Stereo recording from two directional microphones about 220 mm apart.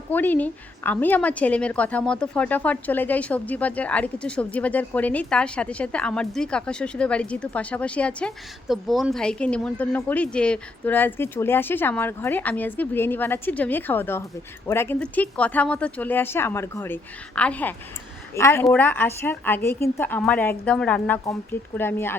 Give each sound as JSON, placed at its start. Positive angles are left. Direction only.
{"t": 0.1, "sound": "a woman's voice", "side_deg": 10}